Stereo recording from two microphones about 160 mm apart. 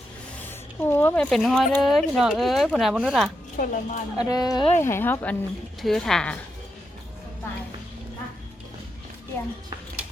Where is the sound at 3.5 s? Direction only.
55° left (ahead or behind).